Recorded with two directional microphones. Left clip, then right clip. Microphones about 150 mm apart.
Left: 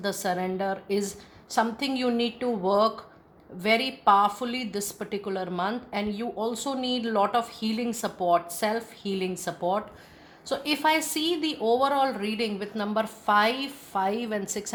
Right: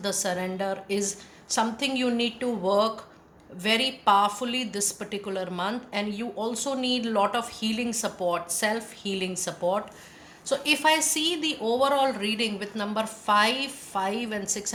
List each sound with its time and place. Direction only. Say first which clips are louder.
0.0 s a woman's voice: even; 35° left (ahead or behind)